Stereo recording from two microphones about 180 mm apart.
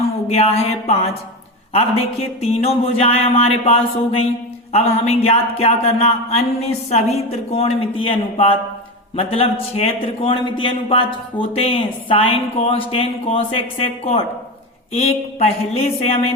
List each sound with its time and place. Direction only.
0.3 s a man's voice: 35° left (ahead or behind)